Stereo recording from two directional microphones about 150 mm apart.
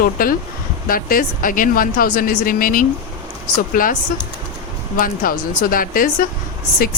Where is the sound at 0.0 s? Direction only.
75° left (ahead or behind).